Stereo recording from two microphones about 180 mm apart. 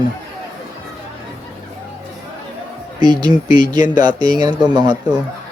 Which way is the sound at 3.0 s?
25° right (ahead or behind).